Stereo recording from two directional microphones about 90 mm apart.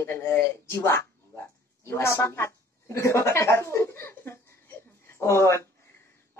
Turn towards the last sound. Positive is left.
turn(degrees=30)  # may be behind; listen again after turning